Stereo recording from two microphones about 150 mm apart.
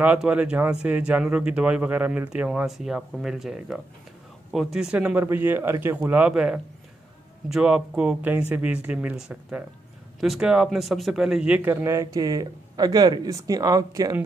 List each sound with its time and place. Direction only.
0.0 s speech: 10° right (ahead or behind)